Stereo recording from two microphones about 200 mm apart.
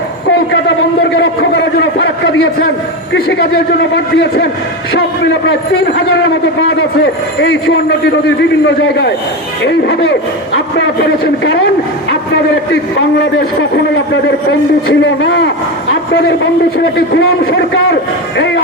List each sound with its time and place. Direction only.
1.1 s a man's voice: 65° left (ahead or behind)
3.9 s a man's voice: 55° left (ahead or behind)
7.0 s a man's voice: 60° left (ahead or behind)
9.6 s a man's voice: 55° left (ahead or behind)
12.7 s a man's voice: 65° left (ahead or behind)
18.3 s speech: 60° left (ahead or behind)